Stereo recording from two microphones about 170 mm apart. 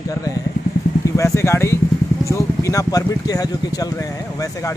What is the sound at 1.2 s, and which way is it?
Speech, 15° left (ahead or behind).